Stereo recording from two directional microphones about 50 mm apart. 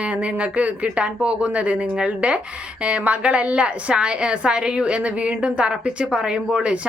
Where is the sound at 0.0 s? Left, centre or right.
Right.